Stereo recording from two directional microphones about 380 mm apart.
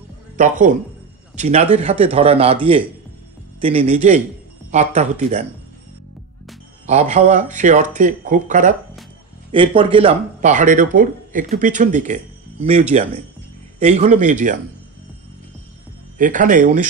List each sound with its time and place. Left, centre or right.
0.4 s a man's voice: centre
6.9 s a man's voice: centre
16.2 s speech: right